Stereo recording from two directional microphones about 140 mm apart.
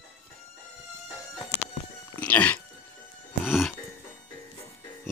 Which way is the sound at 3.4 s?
Centre (ahead or behind).